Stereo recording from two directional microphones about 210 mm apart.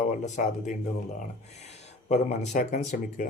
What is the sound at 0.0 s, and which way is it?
Speech, 35° left (ahead or behind).